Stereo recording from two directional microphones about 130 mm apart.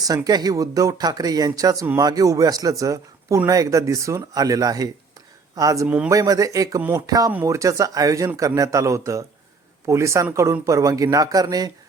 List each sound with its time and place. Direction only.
0.3 s a man's voice: 30° right (ahead or behind)